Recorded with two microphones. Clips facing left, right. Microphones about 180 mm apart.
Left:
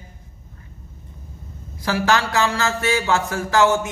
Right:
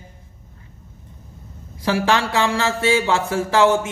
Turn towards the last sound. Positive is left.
turn(degrees=-25)  # may be behind; listen again after turning